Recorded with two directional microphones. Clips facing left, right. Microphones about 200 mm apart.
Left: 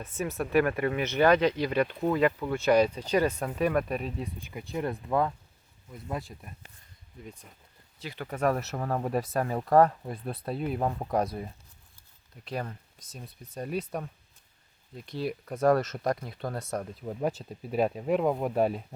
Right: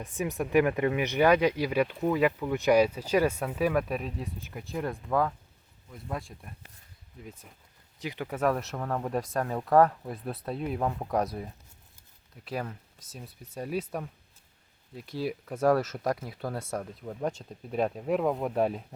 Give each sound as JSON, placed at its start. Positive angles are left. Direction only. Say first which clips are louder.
{"t": 0.0, "sound": "speech", "louder": "right 1 dB", "side_deg": -15}
{"t": 7.9, "sound": "speech", "louder": "right 3 dB", "side_deg": -15}
{"t": 8.3, "sound": "speech", "louder": "left 1 dB", "side_deg": 0}
{"t": 12.5, "sound": "speech", "louder": "even", "side_deg": -5}
{"t": 17.1, "sound": "speech", "louder": "left 2 dB", "side_deg": 10}